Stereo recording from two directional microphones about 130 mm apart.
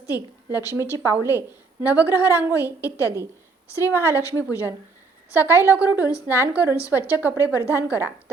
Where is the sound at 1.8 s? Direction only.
10° right (ahead or behind).